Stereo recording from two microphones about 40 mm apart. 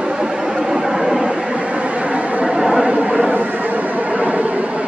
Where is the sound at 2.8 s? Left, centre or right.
Right.